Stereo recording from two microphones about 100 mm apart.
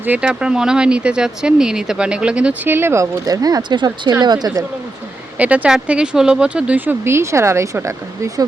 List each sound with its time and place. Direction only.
0.0 s speech: 15° right (ahead or behind); by 4.6 s 40° right (ahead or behind)
5.4 s speech: 15° right (ahead or behind); by 8.4 s 30° right (ahead or behind)